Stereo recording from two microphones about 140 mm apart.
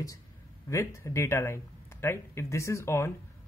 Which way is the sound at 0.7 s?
20° left (ahead or behind).